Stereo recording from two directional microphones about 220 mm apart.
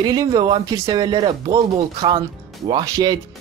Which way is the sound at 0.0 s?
15° right (ahead or behind).